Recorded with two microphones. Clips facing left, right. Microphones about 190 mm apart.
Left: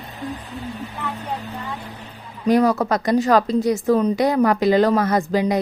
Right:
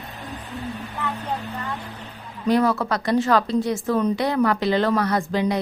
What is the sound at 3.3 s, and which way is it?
Speech, 45° left (ahead or behind).